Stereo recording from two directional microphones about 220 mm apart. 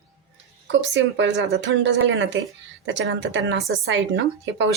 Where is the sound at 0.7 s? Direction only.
55° right (ahead or behind).